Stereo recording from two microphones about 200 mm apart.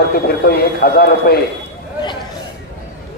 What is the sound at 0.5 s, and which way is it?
Speech, 50° left (ahead or behind).